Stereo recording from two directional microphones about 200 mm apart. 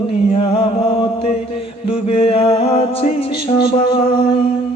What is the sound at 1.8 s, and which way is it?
Music, 25° left (ahead or behind).